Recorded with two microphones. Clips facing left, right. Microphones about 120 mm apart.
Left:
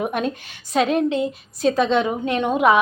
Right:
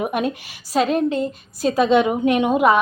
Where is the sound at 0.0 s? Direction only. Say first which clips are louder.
Right 1 dB; 5° right (ahead or behind).